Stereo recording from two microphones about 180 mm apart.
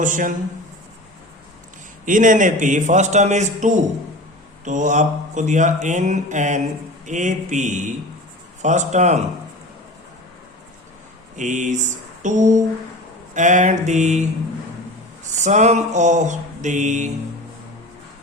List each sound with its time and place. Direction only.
0.0 s mantra: 45° right (ahead or behind)
2.0 s mantra: 45° right (ahead or behind)
11.3 s mantra: 45° right (ahead or behind)
15.3 s mantra: 40° right (ahead or behind)